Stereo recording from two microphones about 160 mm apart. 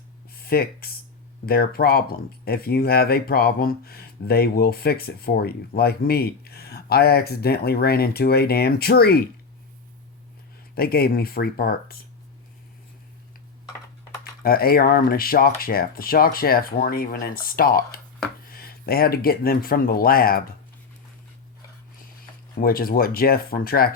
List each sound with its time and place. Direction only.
0.3 s speech: 70° left (ahead or behind)
10.8 s speech: 75° left (ahead or behind)
14.4 s speech: 70° left (ahead or behind)
22.5 s speech: 65° left (ahead or behind)